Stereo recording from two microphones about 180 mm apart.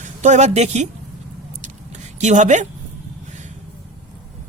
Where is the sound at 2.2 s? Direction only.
40° right (ahead or behind).